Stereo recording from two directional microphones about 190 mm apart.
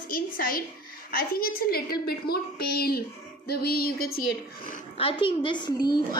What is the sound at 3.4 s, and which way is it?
Music, 55° left (ahead or behind).